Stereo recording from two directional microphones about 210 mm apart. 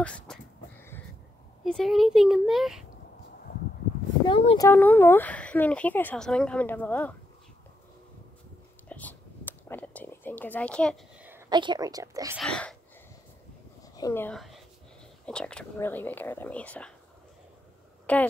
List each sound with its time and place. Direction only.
0.0 s a sound: 5° left (ahead or behind)
1.6 s speech: centre (ahead or behind)
4.3 s speech: 25° left (ahead or behind)
4.6 s speech: 10° left (ahead or behind)
8.8 s a sound: 5° left (ahead or behind)
11.1 s speech: 10° right (ahead or behind)
12.4 s speech: 5° left (ahead or behind)
13.9 s speech: 15° left (ahead or behind)
18.1 s speech: 5° left (ahead or behind)